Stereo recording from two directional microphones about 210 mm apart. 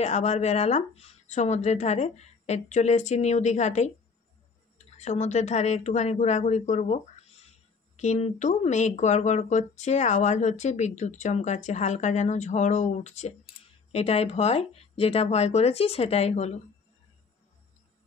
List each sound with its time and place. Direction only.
0.0 s speech: 30° left (ahead or behind)
4.9 s speech: 35° left (ahead or behind)